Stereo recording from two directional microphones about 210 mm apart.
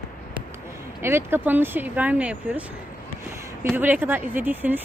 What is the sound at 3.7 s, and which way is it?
Speech, 5° right (ahead or behind).